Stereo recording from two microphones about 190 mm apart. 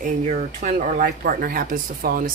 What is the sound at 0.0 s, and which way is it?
Speech, 40° right (ahead or behind).